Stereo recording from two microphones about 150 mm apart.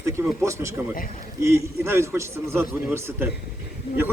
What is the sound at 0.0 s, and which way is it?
A man's voice, 20° right (ahead or behind).